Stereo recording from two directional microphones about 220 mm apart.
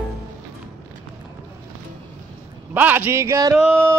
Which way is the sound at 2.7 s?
10° right (ahead or behind).